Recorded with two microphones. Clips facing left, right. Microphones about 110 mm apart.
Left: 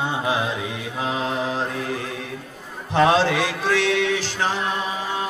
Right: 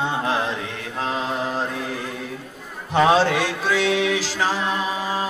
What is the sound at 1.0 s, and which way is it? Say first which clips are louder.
Mantra: even; 5° left (ahead or behind).